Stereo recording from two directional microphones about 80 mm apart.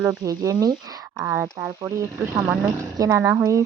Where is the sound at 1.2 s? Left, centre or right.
Right.